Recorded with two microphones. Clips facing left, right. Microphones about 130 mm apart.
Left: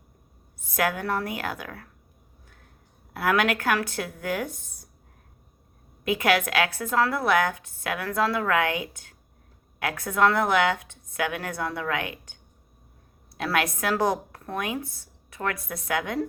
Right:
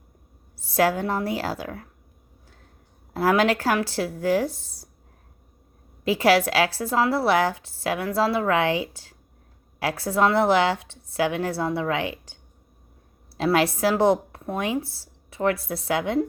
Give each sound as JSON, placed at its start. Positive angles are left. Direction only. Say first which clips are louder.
{"t": 0.6, "sound": "a woman's voice", "louder": "right 5 dB", "side_deg": -30}
{"t": 3.1, "sound": "a woman's voice", "louder": "right 4 dB", "side_deg": -30}
{"t": 6.1, "sound": "a woman's voice", "louder": "right 4 dB", "side_deg": -30}